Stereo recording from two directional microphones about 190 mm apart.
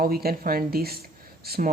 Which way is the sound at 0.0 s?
50° right (ahead or behind).